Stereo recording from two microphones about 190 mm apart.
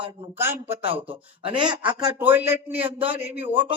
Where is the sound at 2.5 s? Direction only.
10° right (ahead or behind).